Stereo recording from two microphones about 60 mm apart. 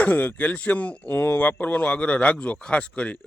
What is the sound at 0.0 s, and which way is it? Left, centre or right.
Speech, left.